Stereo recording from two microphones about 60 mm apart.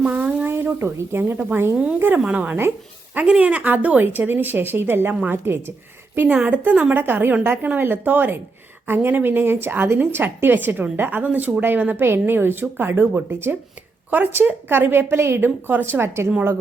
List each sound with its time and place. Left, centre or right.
0.0 s a sound: right
0.4 s speech: right
1.7 s a woman's voice: centre
2.0 s a woman's voice: right
2.2 s a woman's voice: right
6.2 s a woman's voice: right
7.0 s a woman's voice: right
16.0 s a woman's voice: right